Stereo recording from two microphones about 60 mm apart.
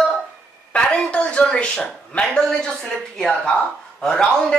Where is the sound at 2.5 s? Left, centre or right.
Centre.